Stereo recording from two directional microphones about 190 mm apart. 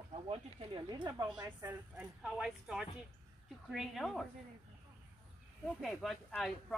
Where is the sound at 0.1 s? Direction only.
30° right (ahead or behind).